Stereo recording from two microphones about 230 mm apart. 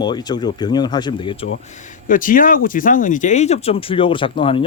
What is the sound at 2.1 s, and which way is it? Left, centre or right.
Speech, left.